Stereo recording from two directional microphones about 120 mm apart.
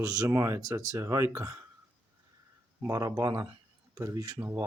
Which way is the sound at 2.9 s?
30° right (ahead or behind).